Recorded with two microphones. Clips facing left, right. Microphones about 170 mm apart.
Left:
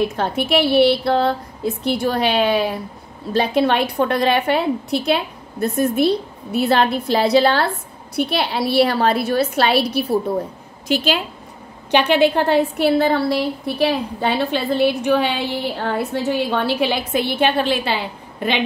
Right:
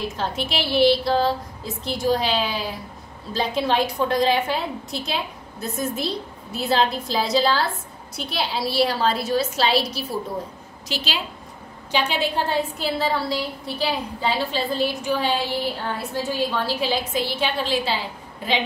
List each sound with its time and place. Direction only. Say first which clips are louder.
0.0 s a woman's voice: left 7 dB; 60° left (ahead or behind)
11.9 s a woman's voice: left 9 dB; 65° left (ahead or behind)